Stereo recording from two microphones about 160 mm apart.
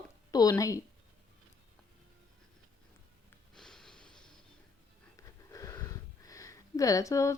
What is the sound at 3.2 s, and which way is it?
Snort, 5° left (ahead or behind).